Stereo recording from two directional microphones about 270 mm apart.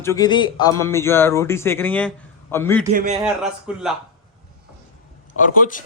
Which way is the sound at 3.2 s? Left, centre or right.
Centre.